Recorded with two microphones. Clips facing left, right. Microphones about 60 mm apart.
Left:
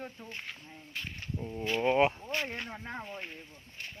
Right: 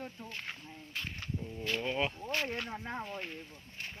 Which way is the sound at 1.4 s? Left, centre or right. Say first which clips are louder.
Left 7 dB; left.